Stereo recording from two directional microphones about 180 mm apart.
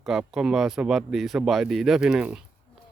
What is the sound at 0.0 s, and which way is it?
Speech, 5° right (ahead or behind).